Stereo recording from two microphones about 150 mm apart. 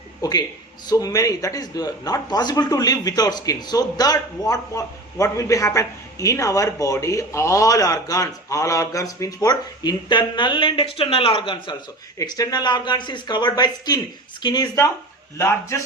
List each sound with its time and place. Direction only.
0.2 s speech: 25° left (ahead or behind)